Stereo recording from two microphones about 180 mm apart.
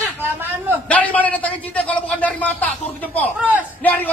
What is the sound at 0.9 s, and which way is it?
A man's voice, 10° left (ahead or behind).